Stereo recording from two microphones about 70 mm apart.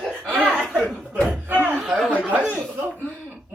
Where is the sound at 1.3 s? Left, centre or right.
Right.